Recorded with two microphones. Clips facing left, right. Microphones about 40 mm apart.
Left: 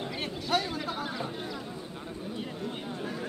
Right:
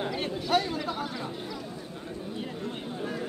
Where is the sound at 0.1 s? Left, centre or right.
Centre.